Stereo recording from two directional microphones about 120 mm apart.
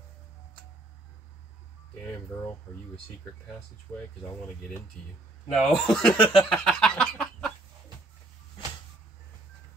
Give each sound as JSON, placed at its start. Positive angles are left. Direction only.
{"t": 2.3, "sound": "speech", "side_deg": 20}
{"t": 5.5, "sound": "speech", "side_deg": 5}